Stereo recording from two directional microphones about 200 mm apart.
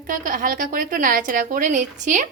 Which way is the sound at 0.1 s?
45° right (ahead or behind).